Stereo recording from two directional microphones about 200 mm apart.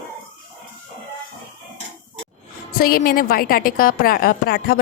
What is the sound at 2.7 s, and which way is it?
Speech, 50° left (ahead or behind).